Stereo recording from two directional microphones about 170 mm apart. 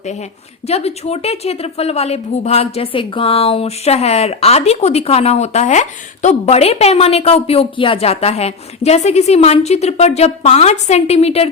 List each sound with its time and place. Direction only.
0.0 s a woman's voice: 40° left (ahead or behind)